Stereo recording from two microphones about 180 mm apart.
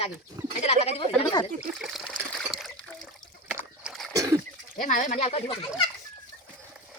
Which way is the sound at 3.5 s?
5° right (ahead or behind).